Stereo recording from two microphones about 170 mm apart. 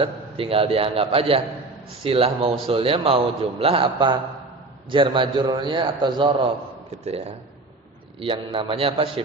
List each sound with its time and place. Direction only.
0.0 s a man's voice: 35° right (ahead or behind)